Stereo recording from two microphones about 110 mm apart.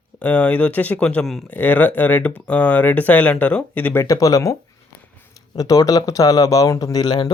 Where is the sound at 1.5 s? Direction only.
15° left (ahead or behind).